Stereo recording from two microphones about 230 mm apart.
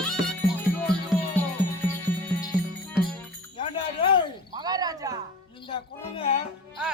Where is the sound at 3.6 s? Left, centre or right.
Left.